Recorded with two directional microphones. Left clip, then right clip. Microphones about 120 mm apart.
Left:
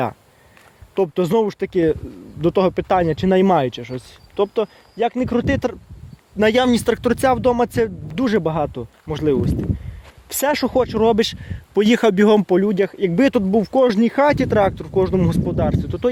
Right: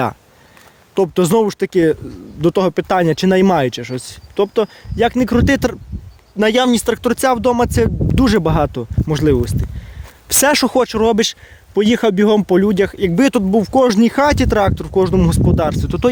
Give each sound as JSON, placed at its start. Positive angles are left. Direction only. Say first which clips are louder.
{"t": 0.9, "sound": "speech", "louder": "right 4 dB", "side_deg": -50}
{"t": 6.3, "sound": "speech", "louder": "right 2 dB", "side_deg": -15}
{"t": 7.1, "sound": "speech", "louder": "right 2 dB", "side_deg": -20}
{"t": 8.1, "sound": "speech", "louder": "right 5 dB", "side_deg": -40}
{"t": 10.2, "sound": "speech", "louder": "right 6 dB", "side_deg": -50}
{"t": 11.2, "sound": "speech", "louder": "right 3 dB", "side_deg": -10}
{"t": 12.5, "sound": "speech", "louder": "right 3 dB", "side_deg": -35}